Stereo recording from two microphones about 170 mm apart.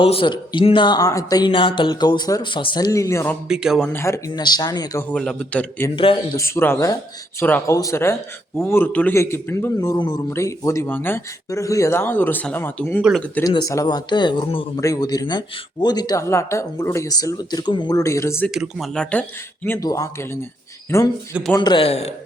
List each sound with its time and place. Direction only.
0.0 s speech: 30° left (ahead or behind); by 3.3 s 15° left (ahead or behind)
3.5 s a man's voice: 5° right (ahead or behind); by 5.0 s 20° left (ahead or behind)
5.1 s a man's voice: 5° left (ahead or behind)
13.0 s speech: 5° right (ahead or behind)
13.4 s speech: 25° left (ahead or behind)
18.4 s speech: centre (ahead or behind)
19.6 s a man's voice: 15° left (ahead or behind)
21.6 s a man's voice: 30° left (ahead or behind)